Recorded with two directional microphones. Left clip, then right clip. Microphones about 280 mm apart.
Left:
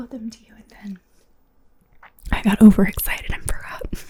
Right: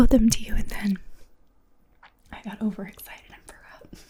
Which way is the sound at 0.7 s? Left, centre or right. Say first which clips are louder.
Right 8 dB; right.